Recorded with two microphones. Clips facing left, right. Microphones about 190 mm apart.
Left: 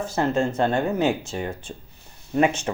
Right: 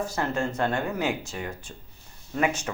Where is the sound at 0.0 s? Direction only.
25° left (ahead or behind).